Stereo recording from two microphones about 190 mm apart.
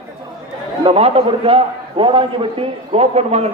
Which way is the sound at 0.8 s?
30° right (ahead or behind).